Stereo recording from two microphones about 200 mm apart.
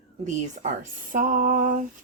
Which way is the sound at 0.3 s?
40° right (ahead or behind).